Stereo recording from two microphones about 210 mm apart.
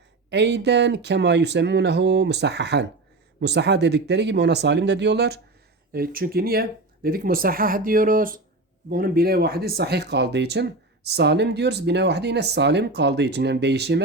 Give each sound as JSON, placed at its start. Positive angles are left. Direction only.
{"t": 0.3, "sound": "speech", "side_deg": -55}